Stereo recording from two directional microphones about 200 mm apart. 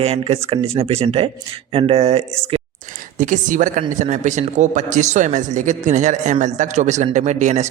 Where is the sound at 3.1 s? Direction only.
40° right (ahead or behind).